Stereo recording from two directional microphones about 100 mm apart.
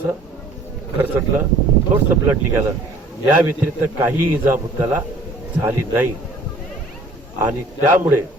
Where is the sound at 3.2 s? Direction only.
20° right (ahead or behind).